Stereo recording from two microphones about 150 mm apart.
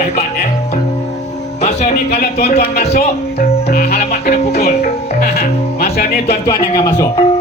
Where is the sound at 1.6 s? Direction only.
45° left (ahead or behind).